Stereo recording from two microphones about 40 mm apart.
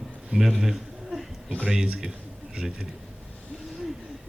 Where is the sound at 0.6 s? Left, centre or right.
Centre.